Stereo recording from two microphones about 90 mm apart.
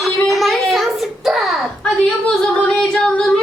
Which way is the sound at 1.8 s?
10° left (ahead or behind).